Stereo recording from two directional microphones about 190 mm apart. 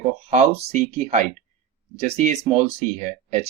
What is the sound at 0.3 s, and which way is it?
Speech, 35° right (ahead or behind).